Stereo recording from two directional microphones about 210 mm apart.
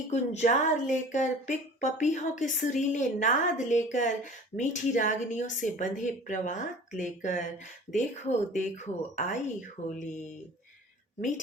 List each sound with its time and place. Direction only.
0.1 s speech: 30° left (ahead or behind)